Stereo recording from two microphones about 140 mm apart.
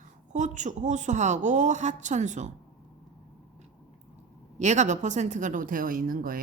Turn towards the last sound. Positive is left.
turn(degrees=-85)